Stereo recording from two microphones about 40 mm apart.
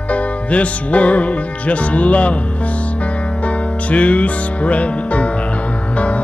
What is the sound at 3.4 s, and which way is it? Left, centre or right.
Music, left.